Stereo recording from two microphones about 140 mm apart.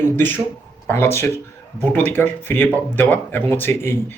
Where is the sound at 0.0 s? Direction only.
15° left (ahead or behind).